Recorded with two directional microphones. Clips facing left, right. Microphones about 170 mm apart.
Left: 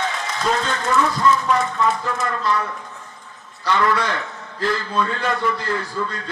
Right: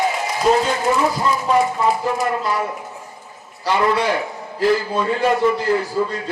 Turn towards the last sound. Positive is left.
turn(degrees=-25)  # may be behind; listen again after turning